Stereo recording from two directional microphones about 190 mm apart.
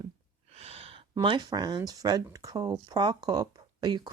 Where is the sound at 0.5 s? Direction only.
30° right (ahead or behind).